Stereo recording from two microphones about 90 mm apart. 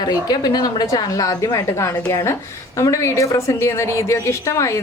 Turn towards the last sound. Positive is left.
turn(degrees=30)  # may be behind; listen again after turning